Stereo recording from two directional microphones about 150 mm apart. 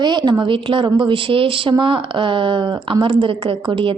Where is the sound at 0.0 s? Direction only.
30° right (ahead or behind).